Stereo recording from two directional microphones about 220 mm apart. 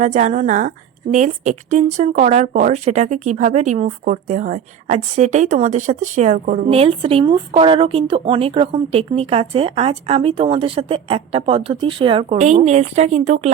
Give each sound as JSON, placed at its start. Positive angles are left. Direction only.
{"t": 0.0, "sound": "speech", "side_deg": -30}
{"t": 6.7, "sound": "speech", "side_deg": -25}